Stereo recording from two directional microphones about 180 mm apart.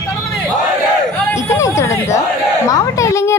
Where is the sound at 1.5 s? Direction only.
15° left (ahead or behind).